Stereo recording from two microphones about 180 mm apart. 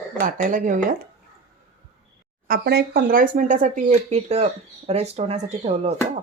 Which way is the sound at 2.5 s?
60° right (ahead or behind).